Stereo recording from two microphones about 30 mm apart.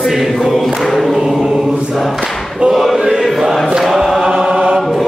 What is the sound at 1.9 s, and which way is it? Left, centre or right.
Choir, centre.